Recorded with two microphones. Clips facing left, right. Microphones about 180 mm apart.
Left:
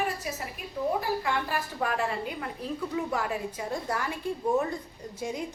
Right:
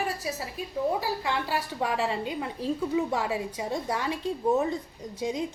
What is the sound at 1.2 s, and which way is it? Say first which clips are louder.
A woman's voice: right 1 dB; 25° right (ahead or behind).